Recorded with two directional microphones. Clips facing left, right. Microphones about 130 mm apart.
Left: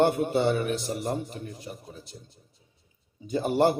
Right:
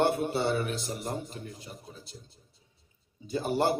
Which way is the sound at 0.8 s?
25° left (ahead or behind).